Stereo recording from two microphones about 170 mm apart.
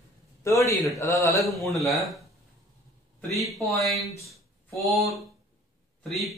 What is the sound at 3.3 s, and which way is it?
Speech, centre (ahead or behind).